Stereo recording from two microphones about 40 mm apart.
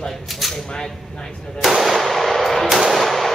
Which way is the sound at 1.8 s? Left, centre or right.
Centre.